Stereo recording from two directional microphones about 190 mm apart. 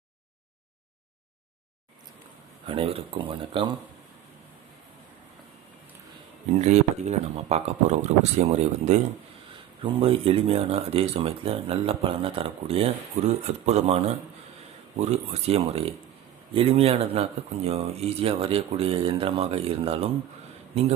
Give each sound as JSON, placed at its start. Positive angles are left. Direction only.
{"t": 2.6, "sound": "speech", "side_deg": -30}
{"t": 6.6, "sound": "speech", "side_deg": -35}
{"t": 15.0, "sound": "speech", "side_deg": -35}